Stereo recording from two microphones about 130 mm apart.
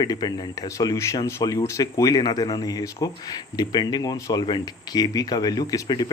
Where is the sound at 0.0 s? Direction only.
30° left (ahead or behind).